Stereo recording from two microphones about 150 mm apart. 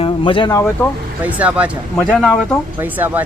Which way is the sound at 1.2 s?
10° right (ahead or behind).